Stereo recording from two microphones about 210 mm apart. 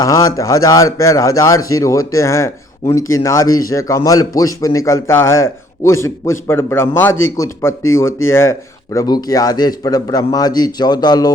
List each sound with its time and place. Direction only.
0.0 s a man's voice: 15° left (ahead or behind)